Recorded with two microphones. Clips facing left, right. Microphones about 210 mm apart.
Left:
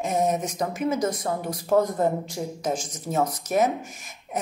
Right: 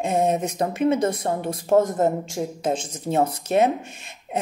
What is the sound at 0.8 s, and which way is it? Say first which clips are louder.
Speech: right 5 dB; 30° right (ahead or behind).